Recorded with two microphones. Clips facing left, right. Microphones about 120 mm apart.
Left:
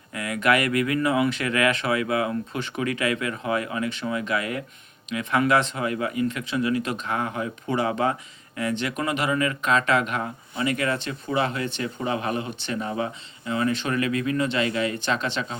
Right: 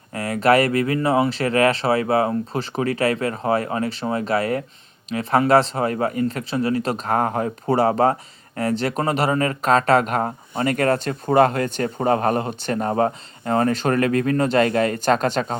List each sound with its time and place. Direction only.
0.1 s speech: 35° right (ahead or behind)